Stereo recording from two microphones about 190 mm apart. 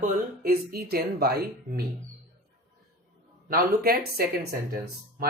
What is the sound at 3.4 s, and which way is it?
Speech, 50° right (ahead or behind).